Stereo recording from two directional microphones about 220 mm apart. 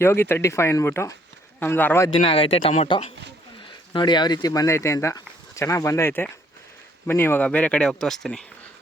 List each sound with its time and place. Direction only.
0.0 s speech: 10° left (ahead or behind)
2.0 s speech: 25° left (ahead or behind); by 8.4 s centre (ahead or behind)